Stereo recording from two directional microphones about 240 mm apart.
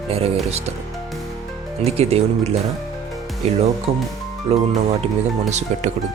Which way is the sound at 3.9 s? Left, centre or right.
Right.